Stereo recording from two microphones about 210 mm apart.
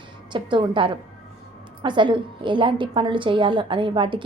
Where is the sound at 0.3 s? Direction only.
25° right (ahead or behind).